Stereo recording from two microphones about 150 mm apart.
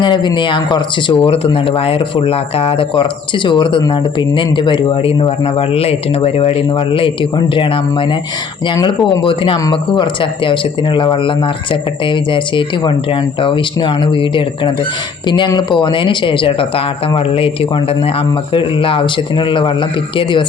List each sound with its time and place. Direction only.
0.0 s speech: 30° left (ahead or behind)